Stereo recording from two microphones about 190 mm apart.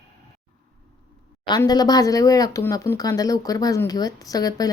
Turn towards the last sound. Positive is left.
turn(degrees=20)  # may be behind; listen again after turning